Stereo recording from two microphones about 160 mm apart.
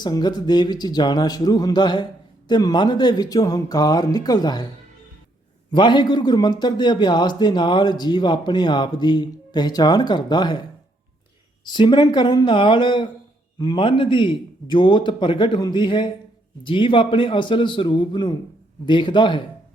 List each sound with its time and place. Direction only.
0.0 s a man's voice: 25° left (ahead or behind)
5.7 s a man's voice: 30° left (ahead or behind)
11.6 s a man's voice: 25° left (ahead or behind)